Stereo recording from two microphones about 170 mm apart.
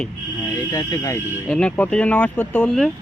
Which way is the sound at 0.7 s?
20° left (ahead or behind).